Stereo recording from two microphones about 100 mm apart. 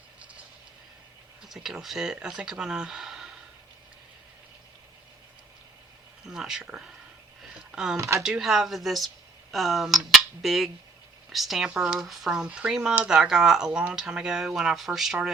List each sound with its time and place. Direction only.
1.4 s speech: 5° right (ahead or behind)
6.2 s speech: 5° right (ahead or behind)
7.4 s a sound: 5° right (ahead or behind)
7.9 s speech: 30° right (ahead or behind)
8.2 s speech: 5° right (ahead or behind)